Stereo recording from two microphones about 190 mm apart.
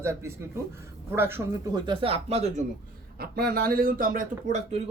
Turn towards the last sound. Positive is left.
turn(degrees=-35)  # may be behind; listen again after turning